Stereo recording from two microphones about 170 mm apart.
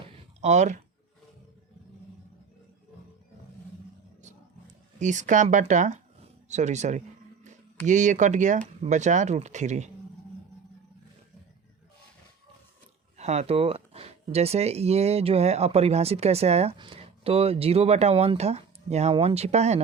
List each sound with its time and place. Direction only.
0.4 s speech: 40° right (ahead or behind)
4.9 s speech: 45° right (ahead or behind)
13.1 s speech: 40° right (ahead or behind)